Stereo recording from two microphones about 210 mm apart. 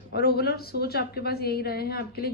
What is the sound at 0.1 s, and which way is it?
A woman's voice, 50° left (ahead or behind).